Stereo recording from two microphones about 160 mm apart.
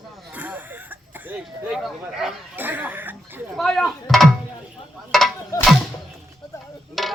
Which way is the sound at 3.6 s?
Centre (ahead or behind).